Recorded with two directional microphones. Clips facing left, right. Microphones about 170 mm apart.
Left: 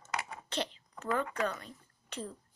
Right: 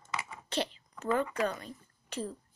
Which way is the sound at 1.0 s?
10° right (ahead or behind).